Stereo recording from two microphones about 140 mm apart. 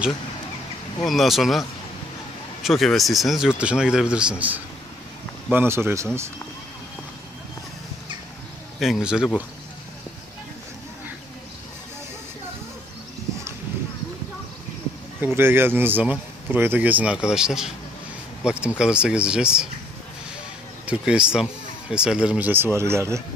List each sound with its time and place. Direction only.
1.0 s speech: centre (ahead or behind)
2.6 s speech: centre (ahead or behind); by 6.0 s 15° right (ahead or behind)
8.7 s speech: centre (ahead or behind)
15.1 s speech: 15° right (ahead or behind)
20.8 s speech: 5° right (ahead or behind)